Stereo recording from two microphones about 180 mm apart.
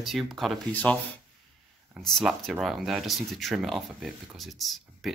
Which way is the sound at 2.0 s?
Centre (ahead or behind).